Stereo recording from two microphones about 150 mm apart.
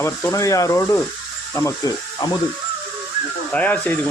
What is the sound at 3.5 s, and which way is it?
Speech, 10° left (ahead or behind).